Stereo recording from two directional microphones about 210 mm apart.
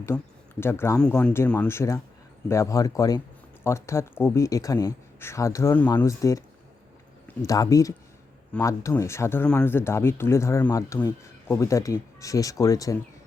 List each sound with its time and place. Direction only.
0.1 s speech: 5° left (ahead or behind)